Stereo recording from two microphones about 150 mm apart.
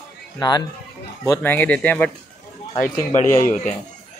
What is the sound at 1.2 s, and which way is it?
Speech, 15° left (ahead or behind).